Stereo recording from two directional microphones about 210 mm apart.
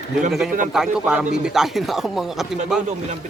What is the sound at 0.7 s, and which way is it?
A man's voice, 5° right (ahead or behind).